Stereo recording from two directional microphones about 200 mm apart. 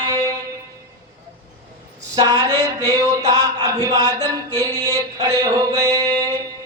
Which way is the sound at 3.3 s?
20° right (ahead or behind).